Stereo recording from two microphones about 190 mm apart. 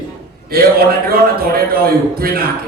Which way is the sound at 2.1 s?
50° right (ahead or behind).